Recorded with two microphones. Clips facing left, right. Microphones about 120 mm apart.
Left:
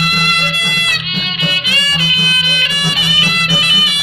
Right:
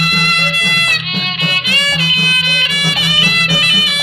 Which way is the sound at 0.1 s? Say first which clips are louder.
Even; 60° right (ahead or behind).